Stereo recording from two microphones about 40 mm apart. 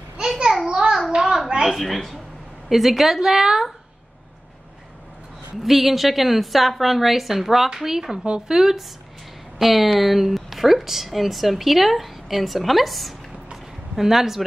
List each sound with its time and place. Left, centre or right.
0.7 s a sound: centre
1.7 s speech: centre
5.6 s speech: centre